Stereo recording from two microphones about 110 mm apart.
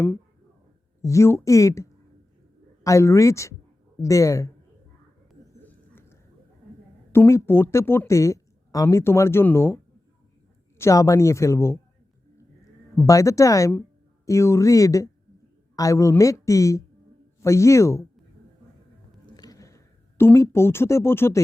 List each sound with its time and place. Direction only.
1.0 s speech: 25° left (ahead or behind)
5.5 s a sound: 20° left (ahead or behind)
7.1 s speech: 25° left (ahead or behind)
10.8 s speech: 30° left (ahead or behind)
13.1 s speech: 30° left (ahead or behind)
19.2 s a sound: 35° left (ahead or behind)